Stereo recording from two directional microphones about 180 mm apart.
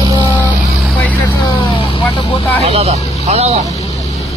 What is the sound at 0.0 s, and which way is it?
Vehicle, 25° right (ahead or behind).